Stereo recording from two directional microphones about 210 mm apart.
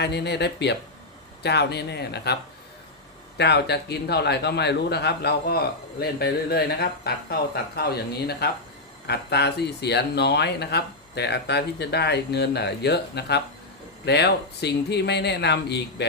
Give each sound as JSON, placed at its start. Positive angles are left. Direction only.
{"t": 0.0, "sound": "a man's voice", "side_deg": 55}